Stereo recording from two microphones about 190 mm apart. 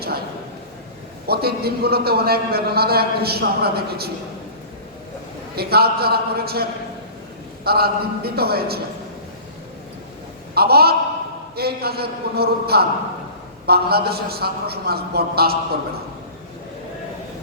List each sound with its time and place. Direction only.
1.3 s speech: 55° right (ahead or behind)
5.5 s speech: 55° right (ahead or behind)
10.5 s speech: 55° right (ahead or behind)